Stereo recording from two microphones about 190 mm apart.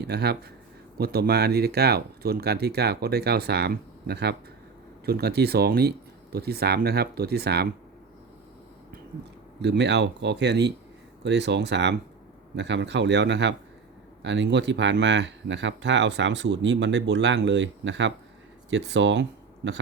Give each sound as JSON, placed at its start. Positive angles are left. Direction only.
{"t": 0.0, "sound": "speech", "side_deg": -60}
{"t": 9.6, "sound": "speech", "side_deg": -65}